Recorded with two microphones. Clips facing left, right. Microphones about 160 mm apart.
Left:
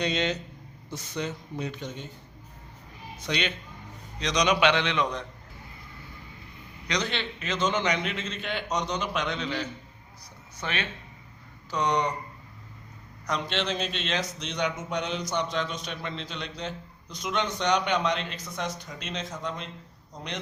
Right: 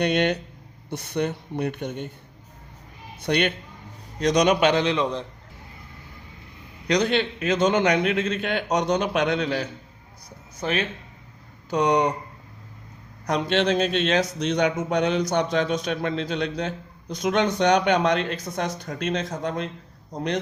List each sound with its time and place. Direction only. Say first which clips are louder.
0.0 s a man's voice: right 6 dB; 60° right (ahead or behind)
3.2 s a man's voice: right 7 dB; 55° right (ahead or behind); by 5.2 s 30° right (ahead or behind)
6.8 s a man's voice: right 9 dB; 50° right (ahead or behind)
10.6 s a man's voice: right 7 dB; 40° right (ahead or behind)
11.7 s a man's voice: right 6 dB; 55° right (ahead or behind)
13.2 s a man's voice: right 8 dB; 55° right (ahead or behind)